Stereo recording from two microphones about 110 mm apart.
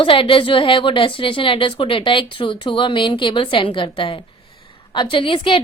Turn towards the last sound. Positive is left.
turn(degrees=50)  # may be behind; listen again after turning